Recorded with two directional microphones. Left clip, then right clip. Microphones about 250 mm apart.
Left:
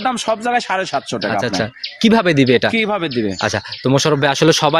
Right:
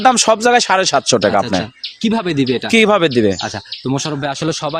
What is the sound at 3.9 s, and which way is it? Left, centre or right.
Speech, left.